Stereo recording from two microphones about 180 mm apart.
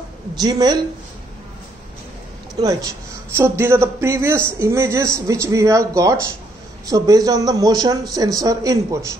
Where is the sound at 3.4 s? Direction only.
15° right (ahead or behind).